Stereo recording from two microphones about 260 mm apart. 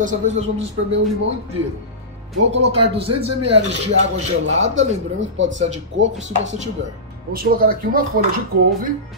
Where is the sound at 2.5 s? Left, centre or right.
Right.